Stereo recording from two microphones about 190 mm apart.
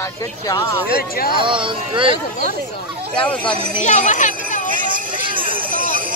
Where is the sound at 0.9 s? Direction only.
50° left (ahead or behind).